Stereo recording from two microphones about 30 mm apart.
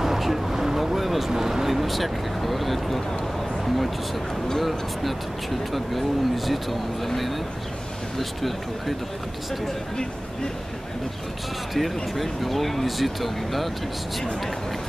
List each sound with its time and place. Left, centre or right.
0.0 s a sound: centre
1.3 s speech: centre
1.7 s speech: centre
11.7 s speech: centre